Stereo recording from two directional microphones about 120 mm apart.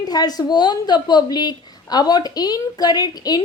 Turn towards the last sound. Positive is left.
turn(degrees=35)  # may be behind; listen again after turning